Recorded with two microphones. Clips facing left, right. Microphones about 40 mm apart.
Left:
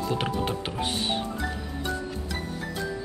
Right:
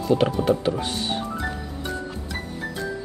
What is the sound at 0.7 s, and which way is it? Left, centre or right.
Speech, left.